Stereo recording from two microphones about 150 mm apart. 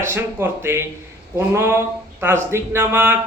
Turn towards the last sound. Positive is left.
turn(degrees=-15)  # may be behind; listen again after turning